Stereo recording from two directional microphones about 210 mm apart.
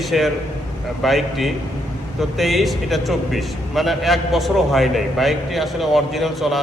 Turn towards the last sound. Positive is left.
turn(degrees=0)  # may be behind; listen again after turning